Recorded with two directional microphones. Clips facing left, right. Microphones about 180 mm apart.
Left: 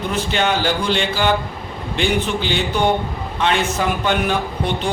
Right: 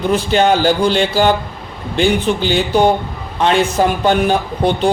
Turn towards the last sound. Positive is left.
turn(degrees=-35)  # may be behind; listen again after turning